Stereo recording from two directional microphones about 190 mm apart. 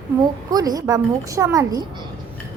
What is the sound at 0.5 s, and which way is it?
A woman's voice, 20° right (ahead or behind).